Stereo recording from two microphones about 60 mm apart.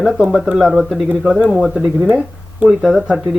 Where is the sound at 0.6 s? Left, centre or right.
Centre.